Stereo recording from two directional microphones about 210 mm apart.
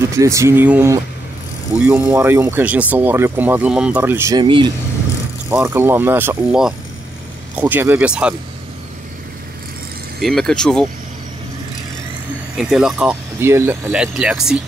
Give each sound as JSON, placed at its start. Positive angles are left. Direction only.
{"t": 0.1, "sound": "speech", "side_deg": -15}
{"t": 5.5, "sound": "speech", "side_deg": -10}
{"t": 10.2, "sound": "speech", "side_deg": 0}
{"t": 12.5, "sound": "speech", "side_deg": 0}